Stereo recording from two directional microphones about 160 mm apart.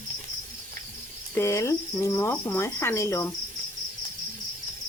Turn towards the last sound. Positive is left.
turn(degrees=20)  # may be behind; listen again after turning